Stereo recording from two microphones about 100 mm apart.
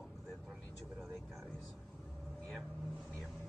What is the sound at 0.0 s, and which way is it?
Vehicle, 5° left (ahead or behind).